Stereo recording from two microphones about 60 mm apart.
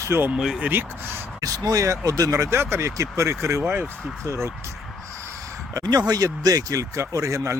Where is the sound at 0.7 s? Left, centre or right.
Right.